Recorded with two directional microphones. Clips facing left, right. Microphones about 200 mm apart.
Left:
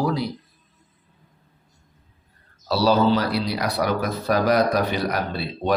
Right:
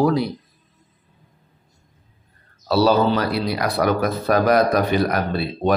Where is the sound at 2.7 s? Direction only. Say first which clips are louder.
Right 2 dB; 55° right (ahead or behind).